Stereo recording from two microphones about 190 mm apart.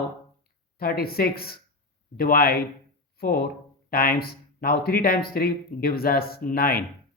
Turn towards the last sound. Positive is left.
turn(degrees=50)  # may be behind; listen again after turning